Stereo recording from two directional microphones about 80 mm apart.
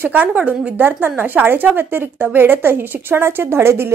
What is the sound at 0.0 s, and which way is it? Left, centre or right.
A woman's voice, right.